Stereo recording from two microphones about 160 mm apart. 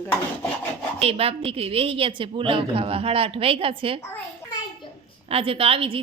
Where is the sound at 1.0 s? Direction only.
35° right (ahead or behind).